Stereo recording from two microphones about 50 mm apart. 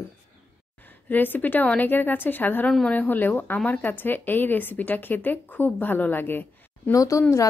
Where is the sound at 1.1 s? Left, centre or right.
Left.